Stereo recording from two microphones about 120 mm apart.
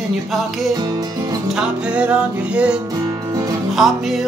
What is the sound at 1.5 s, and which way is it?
Music, 10° right (ahead or behind).